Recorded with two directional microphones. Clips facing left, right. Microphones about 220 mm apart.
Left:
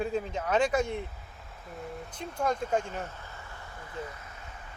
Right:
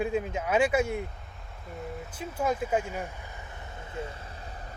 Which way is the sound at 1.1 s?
Centre (ahead or behind).